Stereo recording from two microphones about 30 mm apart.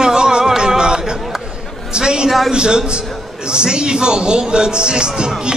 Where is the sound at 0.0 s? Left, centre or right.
Right.